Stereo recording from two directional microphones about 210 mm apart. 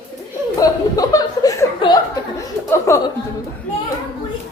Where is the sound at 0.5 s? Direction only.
15° left (ahead or behind).